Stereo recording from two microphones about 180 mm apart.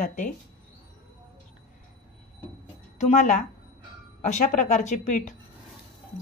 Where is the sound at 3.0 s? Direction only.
40° left (ahead or behind).